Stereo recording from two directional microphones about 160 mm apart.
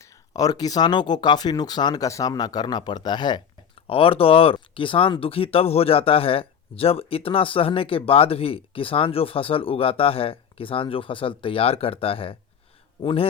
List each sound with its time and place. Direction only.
0.0 s speech: 25° left (ahead or behind)